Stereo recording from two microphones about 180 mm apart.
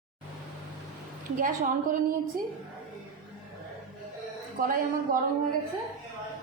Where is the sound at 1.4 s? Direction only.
45° right (ahead or behind).